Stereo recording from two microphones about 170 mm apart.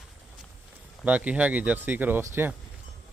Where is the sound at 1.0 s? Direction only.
10° right (ahead or behind).